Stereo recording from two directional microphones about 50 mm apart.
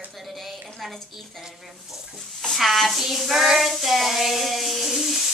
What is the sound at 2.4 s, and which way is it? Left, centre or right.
Child singing, centre.